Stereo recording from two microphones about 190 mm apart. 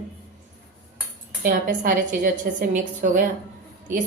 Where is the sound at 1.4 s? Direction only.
45° right (ahead or behind).